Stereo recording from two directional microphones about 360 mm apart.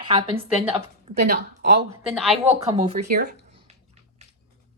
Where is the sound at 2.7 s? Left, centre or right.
Centre.